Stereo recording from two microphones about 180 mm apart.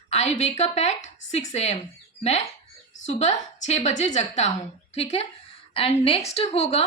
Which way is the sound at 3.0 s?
40° left (ahead or behind).